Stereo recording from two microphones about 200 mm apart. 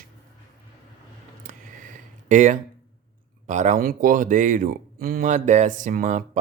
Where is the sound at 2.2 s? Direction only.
40° right (ahead or behind).